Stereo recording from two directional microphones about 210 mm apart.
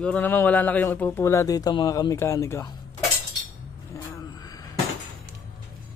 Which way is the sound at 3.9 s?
15° left (ahead or behind).